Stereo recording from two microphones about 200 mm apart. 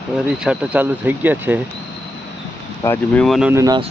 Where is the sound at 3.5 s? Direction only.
15° right (ahead or behind).